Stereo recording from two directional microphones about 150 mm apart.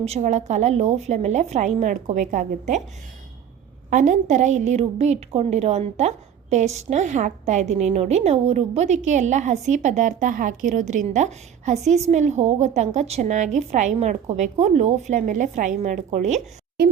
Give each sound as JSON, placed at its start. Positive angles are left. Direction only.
{"t": 0.0, "sound": "a woman's voice", "side_deg": -45}
{"t": 3.8, "sound": "a woman's voice", "side_deg": -55}